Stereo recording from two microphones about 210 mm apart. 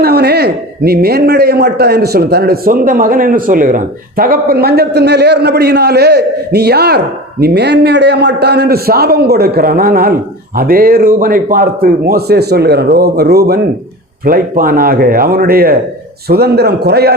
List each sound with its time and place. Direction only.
0.0 s a man's voice: 50° right (ahead or behind)